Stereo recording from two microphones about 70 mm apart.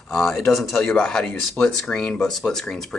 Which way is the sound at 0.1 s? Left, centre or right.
Centre.